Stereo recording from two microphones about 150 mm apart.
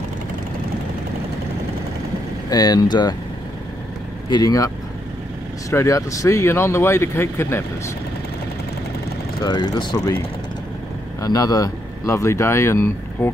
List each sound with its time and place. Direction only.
2.5 s speech: 25° left (ahead or behind)
4.3 s speech: 25° left (ahead or behind)
5.7 s speech: 20° left (ahead or behind)
9.4 s speech: 25° left (ahead or behind)
9.9 s speech: 20° left (ahead or behind)